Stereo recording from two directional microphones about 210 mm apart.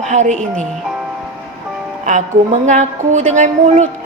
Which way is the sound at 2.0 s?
35° right (ahead or behind).